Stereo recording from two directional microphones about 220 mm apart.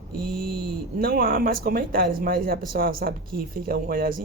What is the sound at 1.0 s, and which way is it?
Speech, 40° right (ahead or behind).